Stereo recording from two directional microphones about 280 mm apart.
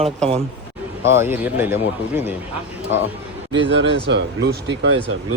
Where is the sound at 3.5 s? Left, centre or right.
Right.